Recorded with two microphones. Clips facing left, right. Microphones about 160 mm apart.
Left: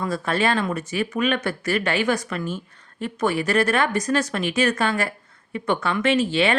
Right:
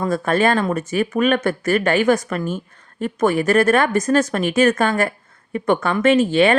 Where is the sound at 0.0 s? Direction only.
50° right (ahead or behind).